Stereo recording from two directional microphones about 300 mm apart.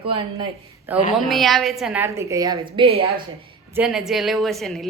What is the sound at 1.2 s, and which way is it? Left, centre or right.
A woman's voice, centre.